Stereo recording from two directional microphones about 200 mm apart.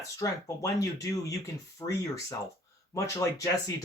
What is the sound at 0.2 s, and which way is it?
Speech, 15° left (ahead or behind).